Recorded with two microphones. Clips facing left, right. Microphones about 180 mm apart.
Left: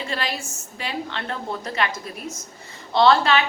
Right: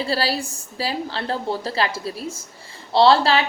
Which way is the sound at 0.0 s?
35° right (ahead or behind).